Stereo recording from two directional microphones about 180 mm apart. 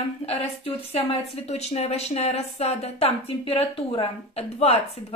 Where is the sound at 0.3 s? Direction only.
30° left (ahead or behind).